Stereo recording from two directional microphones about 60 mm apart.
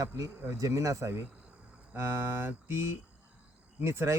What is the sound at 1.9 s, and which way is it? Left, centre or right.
Speech, right.